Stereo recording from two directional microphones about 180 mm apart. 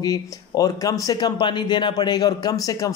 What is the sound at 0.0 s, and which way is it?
Speech, 20° left (ahead or behind).